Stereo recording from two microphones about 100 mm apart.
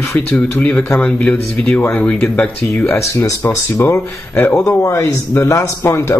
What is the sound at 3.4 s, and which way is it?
A man's voice, 20° left (ahead or behind).